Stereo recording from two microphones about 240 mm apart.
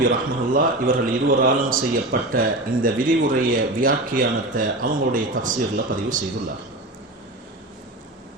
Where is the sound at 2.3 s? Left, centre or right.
Right.